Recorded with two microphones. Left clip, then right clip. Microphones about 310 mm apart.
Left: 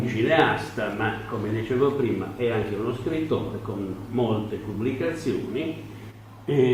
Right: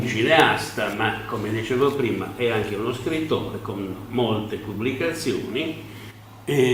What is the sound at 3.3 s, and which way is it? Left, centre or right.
A man's voice, left.